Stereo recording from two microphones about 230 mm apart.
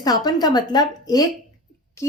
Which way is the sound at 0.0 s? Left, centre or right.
Centre.